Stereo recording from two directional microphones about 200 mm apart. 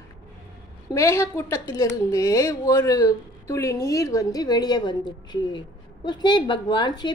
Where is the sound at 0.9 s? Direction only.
15° left (ahead or behind).